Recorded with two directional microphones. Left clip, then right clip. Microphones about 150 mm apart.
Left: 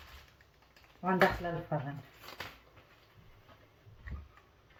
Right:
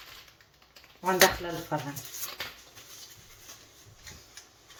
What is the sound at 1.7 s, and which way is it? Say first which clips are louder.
Speech: right 6 dB; 75° right (ahead or behind).